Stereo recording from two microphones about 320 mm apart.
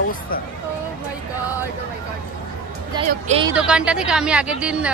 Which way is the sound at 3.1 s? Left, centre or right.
Right.